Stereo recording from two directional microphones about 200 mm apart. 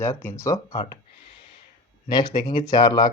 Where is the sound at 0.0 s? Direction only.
15° left (ahead or behind).